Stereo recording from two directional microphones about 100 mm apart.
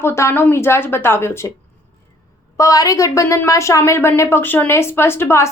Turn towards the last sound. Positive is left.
turn(degrees=25)  # may be behind; listen again after turning